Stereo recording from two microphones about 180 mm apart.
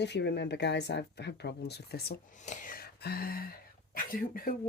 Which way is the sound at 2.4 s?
45° left (ahead or behind).